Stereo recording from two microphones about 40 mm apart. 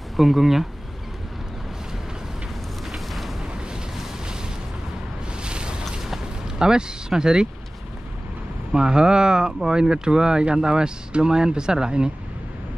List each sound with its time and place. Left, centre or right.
0.2 s speech: centre
3.1 s wind noise: centre
3.7 s waves: centre
5.4 s boat: right
5.9 s a sound: centre
8.7 s speech: centre